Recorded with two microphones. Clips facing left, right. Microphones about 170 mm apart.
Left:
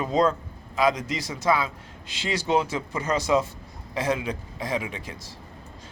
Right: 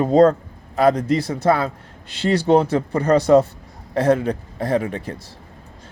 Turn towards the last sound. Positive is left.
turn(degrees=-55)  # may be behind; listen again after turning